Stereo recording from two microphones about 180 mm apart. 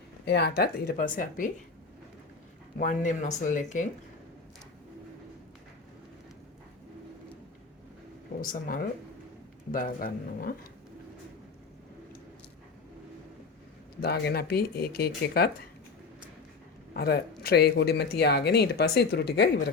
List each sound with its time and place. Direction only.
0.3 s a woman's voice: 65° left (ahead or behind)
2.7 s a woman's voice: 45° left (ahead or behind)
8.4 s a woman's voice: 50° left (ahead or behind)
14.0 s speech: 60° left (ahead or behind)
16.9 s speech: 60° left (ahead or behind)